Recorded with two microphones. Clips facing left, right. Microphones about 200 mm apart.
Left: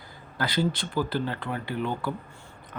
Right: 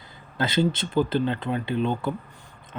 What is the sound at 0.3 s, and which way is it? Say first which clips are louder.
Speech: right 4 dB; 25° right (ahead or behind).